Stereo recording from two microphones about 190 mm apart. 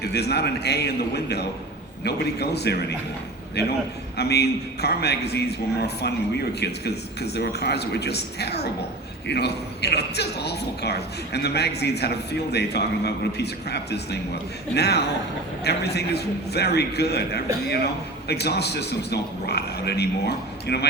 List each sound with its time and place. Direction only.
0.0 s a man's voice: 60° left (ahead or behind)